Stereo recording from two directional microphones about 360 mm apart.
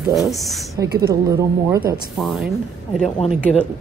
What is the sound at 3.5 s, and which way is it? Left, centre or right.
Speech, centre.